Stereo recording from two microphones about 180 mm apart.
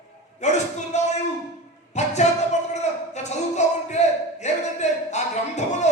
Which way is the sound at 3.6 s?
40° left (ahead or behind).